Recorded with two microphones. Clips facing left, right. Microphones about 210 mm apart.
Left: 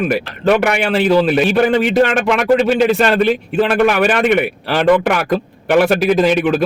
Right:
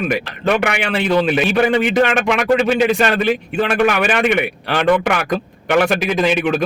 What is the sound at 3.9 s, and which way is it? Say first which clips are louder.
A man's voice: left 3 dB; centre (ahead or behind).